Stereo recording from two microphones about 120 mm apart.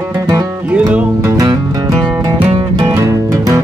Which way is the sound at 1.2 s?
30° right (ahead or behind).